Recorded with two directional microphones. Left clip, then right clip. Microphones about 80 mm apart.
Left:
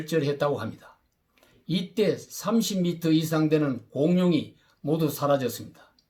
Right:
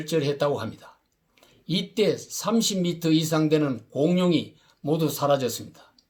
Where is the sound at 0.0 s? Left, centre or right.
Right.